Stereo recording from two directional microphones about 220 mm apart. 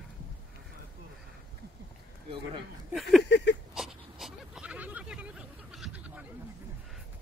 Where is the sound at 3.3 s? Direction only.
50° left (ahead or behind).